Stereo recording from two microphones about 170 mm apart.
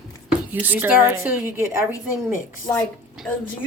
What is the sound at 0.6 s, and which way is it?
A woman's voice, 10° right (ahead or behind).